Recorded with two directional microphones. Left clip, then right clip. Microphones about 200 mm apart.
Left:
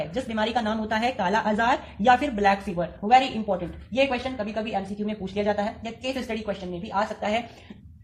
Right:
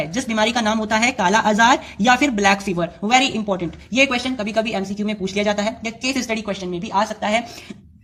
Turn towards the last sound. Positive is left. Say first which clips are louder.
# right 6 dB
turn(degrees=0)  # may be behind; listen again after turning